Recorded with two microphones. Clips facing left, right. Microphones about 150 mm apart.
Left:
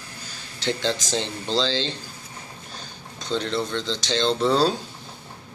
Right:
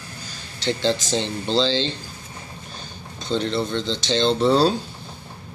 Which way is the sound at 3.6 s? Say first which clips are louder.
Right 3 dB; 20° right (ahead or behind).